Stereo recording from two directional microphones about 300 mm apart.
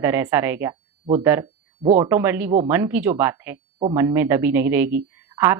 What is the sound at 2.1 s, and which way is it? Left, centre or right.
Speech, centre.